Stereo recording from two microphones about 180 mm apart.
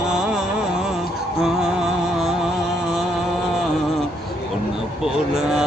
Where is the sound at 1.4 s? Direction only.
5° right (ahead or behind).